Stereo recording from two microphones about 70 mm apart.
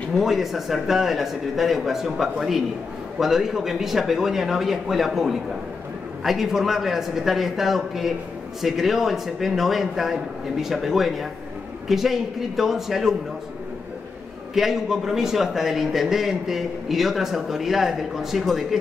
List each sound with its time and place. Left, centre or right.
0.1 s a man's voice: centre
14.5 s a man's voice: centre